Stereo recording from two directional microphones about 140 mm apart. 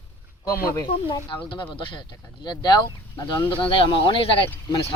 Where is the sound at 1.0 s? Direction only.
35° left (ahead or behind).